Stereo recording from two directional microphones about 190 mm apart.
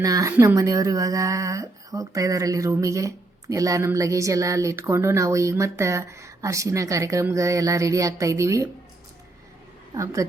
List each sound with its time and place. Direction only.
0.0 s a woman's voice: 20° right (ahead or behind)
9.9 s a woman's voice: 15° right (ahead or behind)